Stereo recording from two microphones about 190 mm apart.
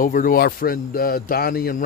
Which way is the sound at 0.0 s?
45° left (ahead or behind).